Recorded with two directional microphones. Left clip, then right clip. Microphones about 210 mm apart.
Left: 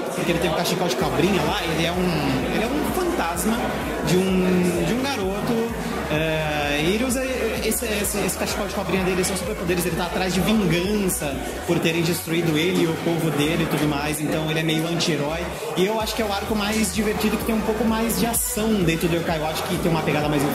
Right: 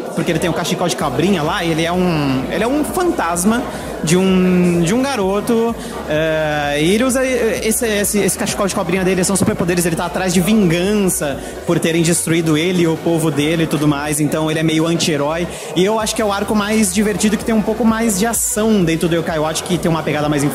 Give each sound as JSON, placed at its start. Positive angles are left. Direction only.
{"t": 6.1, "sound": "speech", "side_deg": -45}
{"t": 10.2, "sound": "speech", "side_deg": -50}
{"t": 14.6, "sound": "speech", "side_deg": -45}